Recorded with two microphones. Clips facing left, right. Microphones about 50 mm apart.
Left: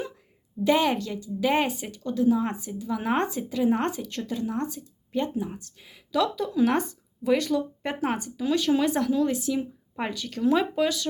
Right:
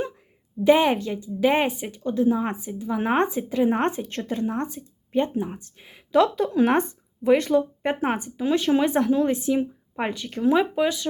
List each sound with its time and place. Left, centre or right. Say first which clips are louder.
0.6 s speech: right 4 dB; right
6.7 s speech: right 4 dB; right